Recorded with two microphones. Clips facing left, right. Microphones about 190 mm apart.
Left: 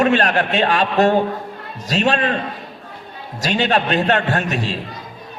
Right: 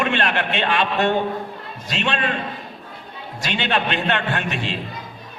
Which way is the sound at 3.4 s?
40° left (ahead or behind).